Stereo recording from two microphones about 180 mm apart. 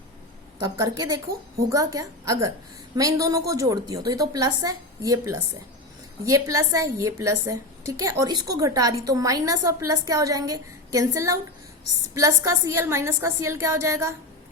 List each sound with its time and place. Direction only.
0.6 s a woman's voice: 20° right (ahead or behind)